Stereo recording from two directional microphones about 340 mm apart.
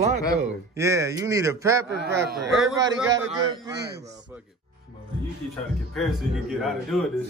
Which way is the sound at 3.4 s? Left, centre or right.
Centre.